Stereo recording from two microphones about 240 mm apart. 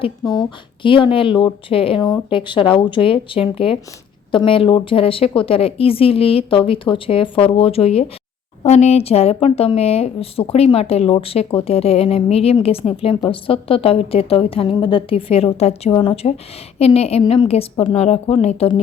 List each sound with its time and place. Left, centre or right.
0.0 s a woman's voice: centre